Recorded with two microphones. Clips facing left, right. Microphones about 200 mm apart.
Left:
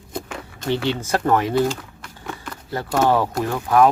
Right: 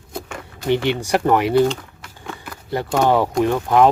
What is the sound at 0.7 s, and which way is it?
Speech, 15° right (ahead or behind).